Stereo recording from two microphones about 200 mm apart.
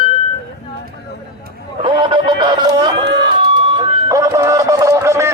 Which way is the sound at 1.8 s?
25° right (ahead or behind).